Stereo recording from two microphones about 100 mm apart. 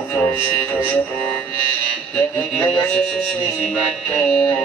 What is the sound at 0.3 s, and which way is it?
Music, 20° left (ahead or behind).